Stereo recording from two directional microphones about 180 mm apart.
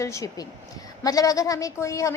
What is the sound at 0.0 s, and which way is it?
A woman's voice, 15° left (ahead or behind).